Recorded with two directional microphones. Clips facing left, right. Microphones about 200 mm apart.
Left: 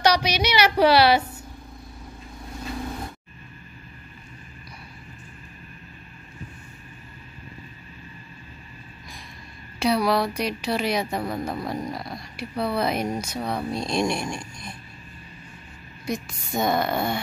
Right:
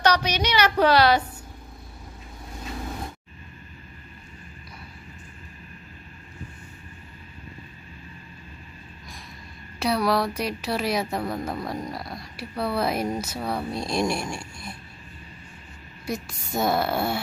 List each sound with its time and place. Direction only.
0.0 s a woman's voice: 10° left (ahead or behind)
9.8 s speech: centre (ahead or behind)
14.4 s a sound: 20° left (ahead or behind)
16.1 s speech: 5° right (ahead or behind)